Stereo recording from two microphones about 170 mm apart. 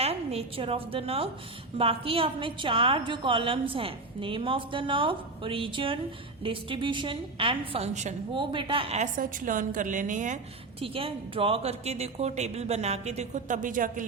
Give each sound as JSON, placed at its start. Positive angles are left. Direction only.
{"t": 0.0, "sound": "a woman's voice", "side_deg": -35}
{"t": 8.3, "sound": "a woman's voice", "side_deg": -30}